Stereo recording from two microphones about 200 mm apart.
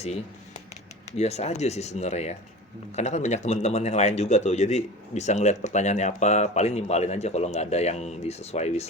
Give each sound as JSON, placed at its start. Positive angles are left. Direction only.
{"t": 1.1, "sound": "speech", "side_deg": 35}